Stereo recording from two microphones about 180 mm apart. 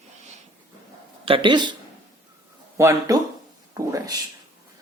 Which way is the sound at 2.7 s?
15° right (ahead or behind).